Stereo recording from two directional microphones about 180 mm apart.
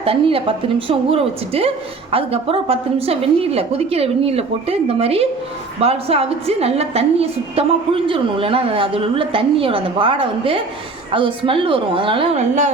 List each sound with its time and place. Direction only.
0.0 s a woman's voice: 30° right (ahead or behind)